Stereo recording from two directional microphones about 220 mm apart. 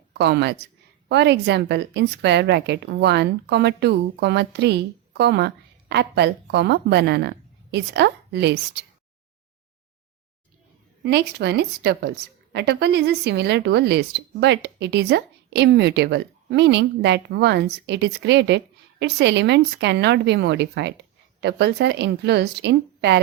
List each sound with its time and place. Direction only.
0.1 s a woman's voice: 50° right (ahead or behind)
11.0 s a woman's voice: 50° right (ahead or behind)